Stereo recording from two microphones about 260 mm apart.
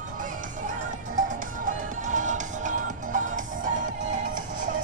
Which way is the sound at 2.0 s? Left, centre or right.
Right.